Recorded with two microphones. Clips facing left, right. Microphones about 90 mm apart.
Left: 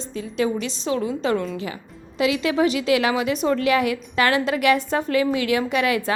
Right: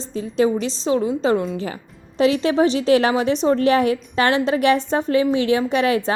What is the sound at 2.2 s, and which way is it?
A woman's voice, 35° right (ahead or behind).